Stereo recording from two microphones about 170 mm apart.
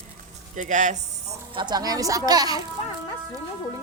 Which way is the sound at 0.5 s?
45° right (ahead or behind).